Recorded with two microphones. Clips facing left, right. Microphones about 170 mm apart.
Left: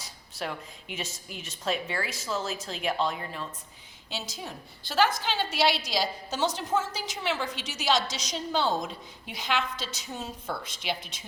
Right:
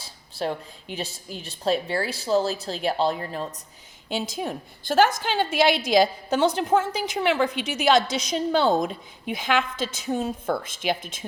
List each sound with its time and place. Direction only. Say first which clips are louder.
0.0 s a woman's voice: right 7 dB; 30° right (ahead or behind)
4.1 s a woman's voice: right 10 dB; 55° right (ahead or behind)